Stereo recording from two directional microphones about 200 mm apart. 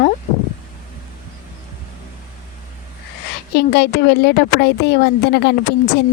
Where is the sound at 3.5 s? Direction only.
55° left (ahead or behind).